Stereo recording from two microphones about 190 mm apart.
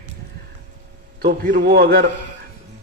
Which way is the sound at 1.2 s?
55° right (ahead or behind).